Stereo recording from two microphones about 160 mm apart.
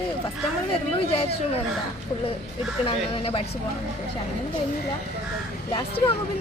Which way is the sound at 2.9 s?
35° left (ahead or behind).